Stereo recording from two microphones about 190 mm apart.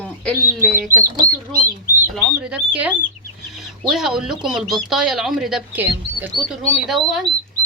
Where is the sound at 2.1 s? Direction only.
5° right (ahead or behind).